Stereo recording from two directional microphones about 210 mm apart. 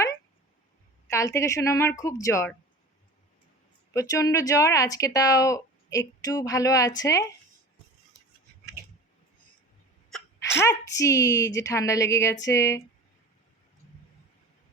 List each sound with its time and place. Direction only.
1.1 s a woman's voice: 15° left (ahead or behind)
3.9 s a woman's voice: 15° left (ahead or behind)
10.4 s a woman's voice: 15° left (ahead or behind)